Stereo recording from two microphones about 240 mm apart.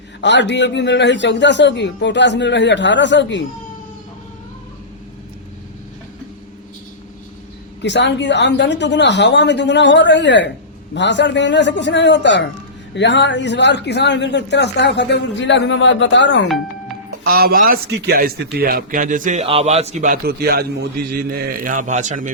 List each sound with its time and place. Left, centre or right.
0.2 s a man's voice: left
7.8 s a man's voice: left
17.2 s a man's voice: right